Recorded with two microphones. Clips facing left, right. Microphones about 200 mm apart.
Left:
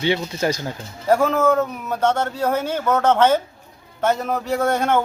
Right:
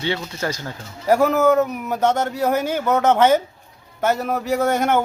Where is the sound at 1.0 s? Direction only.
10° right (ahead or behind).